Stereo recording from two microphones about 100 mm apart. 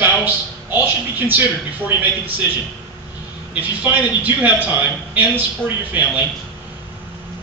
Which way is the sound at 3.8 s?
15° right (ahead or behind).